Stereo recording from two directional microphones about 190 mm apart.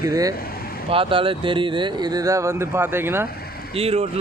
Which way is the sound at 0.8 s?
30° right (ahead or behind).